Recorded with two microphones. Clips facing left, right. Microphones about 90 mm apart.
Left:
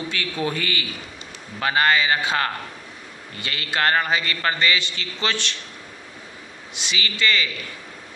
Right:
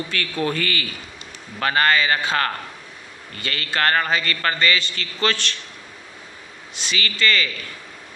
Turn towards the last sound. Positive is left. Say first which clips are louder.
# right 1 dB
turn(degrees=15)  # may be behind; listen again after turning